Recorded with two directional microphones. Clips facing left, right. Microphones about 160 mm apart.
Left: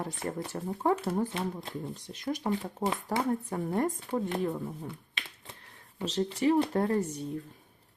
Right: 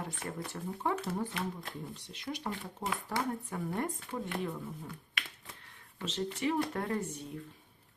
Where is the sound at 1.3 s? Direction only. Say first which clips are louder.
Left 4 dB; 25° left (ahead or behind).